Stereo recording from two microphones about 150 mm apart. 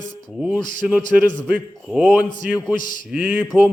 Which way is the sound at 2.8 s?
65° left (ahead or behind).